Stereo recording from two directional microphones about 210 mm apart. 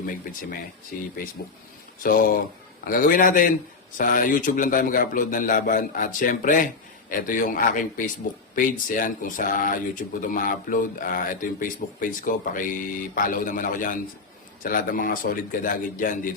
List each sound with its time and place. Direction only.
0.0 s speech: 40° left (ahead or behind)
2.0 s speech: 40° left (ahead or behind)